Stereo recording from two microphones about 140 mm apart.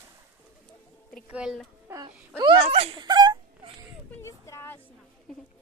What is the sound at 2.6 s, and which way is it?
Wail, 45° right (ahead or behind).